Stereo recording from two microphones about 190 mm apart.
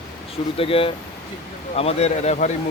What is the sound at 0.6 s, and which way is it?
Speech, 30° left (ahead or behind).